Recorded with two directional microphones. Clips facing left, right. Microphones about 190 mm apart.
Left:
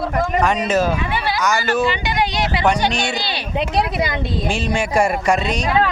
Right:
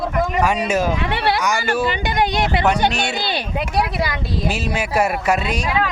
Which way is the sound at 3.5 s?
25° left (ahead or behind).